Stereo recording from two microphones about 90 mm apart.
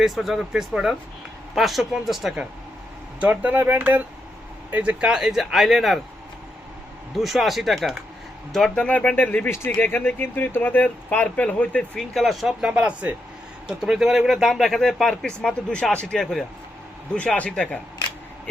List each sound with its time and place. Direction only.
0.0 s speech: 5° right (ahead or behind)
3.2 s speech: 15° right (ahead or behind); by 6.0 s centre (ahead or behind)
7.2 s speech: centre (ahead or behind)
11.9 s speech: centre (ahead or behind)
17.2 s speech: 15° left (ahead or behind)